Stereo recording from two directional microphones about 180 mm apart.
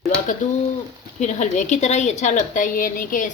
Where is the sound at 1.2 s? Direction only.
40° left (ahead or behind).